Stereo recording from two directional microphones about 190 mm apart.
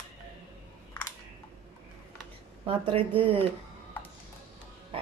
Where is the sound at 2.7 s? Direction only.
30° right (ahead or behind).